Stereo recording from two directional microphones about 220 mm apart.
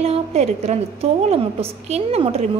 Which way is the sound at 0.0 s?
30° right (ahead or behind).